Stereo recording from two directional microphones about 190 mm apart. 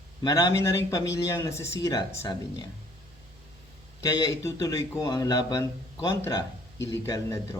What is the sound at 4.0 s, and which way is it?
Speech, 15° left (ahead or behind).